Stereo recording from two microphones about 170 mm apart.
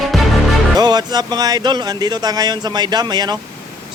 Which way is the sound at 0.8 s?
25° right (ahead or behind).